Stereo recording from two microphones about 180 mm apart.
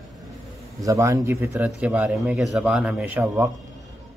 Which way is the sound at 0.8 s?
20° right (ahead or behind).